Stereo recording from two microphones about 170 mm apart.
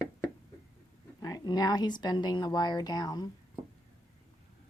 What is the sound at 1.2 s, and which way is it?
Speech, 20° left (ahead or behind).